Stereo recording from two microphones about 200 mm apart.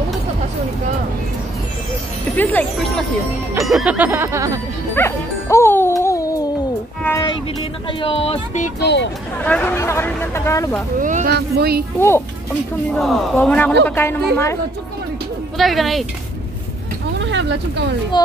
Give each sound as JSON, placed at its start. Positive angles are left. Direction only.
{"t": 2.3, "sound": "speech", "side_deg": 10}
{"t": 3.6, "sound": "music", "side_deg": -5}
{"t": 4.9, "sound": "music", "side_deg": 10}
{"t": 8.0, "sound": "speech", "side_deg": 30}
{"t": 8.7, "sound": "speech", "side_deg": 60}
{"t": 9.4, "sound": "speech", "side_deg": 5}
{"t": 11.0, "sound": "speech", "side_deg": -40}
{"t": 12.9, "sound": "a man's voice", "side_deg": 0}
{"t": 15.5, "sound": "a man's voice", "side_deg": 0}
{"t": 17.2, "sound": "speech", "side_deg": -65}
{"t": 18.1, "sound": "speech", "side_deg": 20}